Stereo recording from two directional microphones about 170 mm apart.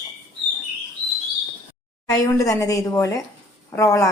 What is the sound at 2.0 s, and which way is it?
A woman's voice, 20° left (ahead or behind).